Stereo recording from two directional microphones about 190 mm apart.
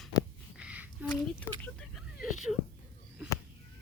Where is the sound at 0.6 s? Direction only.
5° right (ahead or behind).